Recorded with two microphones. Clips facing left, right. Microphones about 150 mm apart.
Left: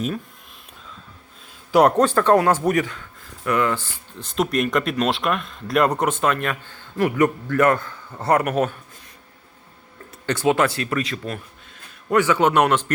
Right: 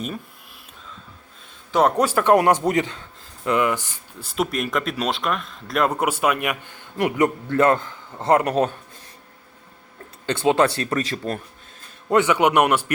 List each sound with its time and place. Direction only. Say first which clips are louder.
2.0 s speech: left 1 dB; 10° right (ahead or behind); by 8.7 s 30° right (ahead or behind)
10.2 s speech: right 1 dB; 25° right (ahead or behind)
12.0 s speech: even; 20° right (ahead or behind)